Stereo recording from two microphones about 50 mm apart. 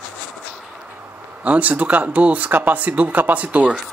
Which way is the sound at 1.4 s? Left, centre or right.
Right.